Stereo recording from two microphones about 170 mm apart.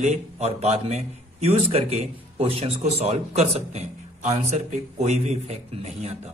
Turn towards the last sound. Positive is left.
turn(degrees=-40)  # may be behind; listen again after turning